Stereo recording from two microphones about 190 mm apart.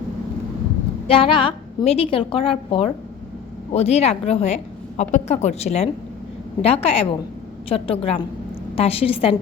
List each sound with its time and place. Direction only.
1.0 s a woman's voice: 30° left (ahead or behind)